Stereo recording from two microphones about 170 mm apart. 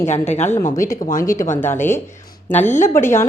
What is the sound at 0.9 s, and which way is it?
Speech, 50° left (ahead or behind).